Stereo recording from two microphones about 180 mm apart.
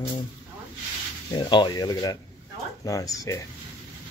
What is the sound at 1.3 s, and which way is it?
Speech, 25° left (ahead or behind).